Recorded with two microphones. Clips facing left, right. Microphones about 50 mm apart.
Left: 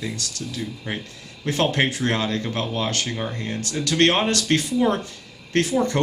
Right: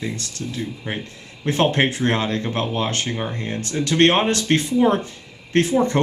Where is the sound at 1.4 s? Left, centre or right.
Right.